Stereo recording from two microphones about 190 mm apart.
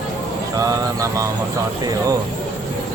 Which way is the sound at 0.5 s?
20° right (ahead or behind).